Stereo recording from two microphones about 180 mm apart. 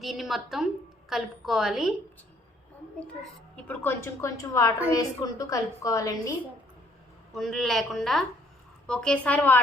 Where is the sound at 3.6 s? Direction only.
10° left (ahead or behind).